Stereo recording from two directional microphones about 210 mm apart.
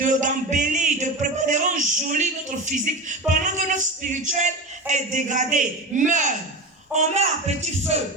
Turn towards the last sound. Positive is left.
turn(degrees=-30)  # may be behind; listen again after turning